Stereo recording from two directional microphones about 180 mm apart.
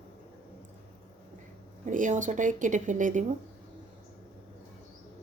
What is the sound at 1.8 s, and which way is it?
Speech, 45° right (ahead or behind).